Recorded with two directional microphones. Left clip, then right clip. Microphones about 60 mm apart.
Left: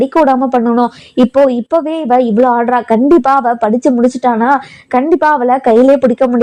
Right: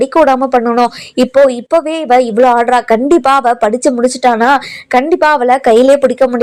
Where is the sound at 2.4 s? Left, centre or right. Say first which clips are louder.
Right 2 dB; centre.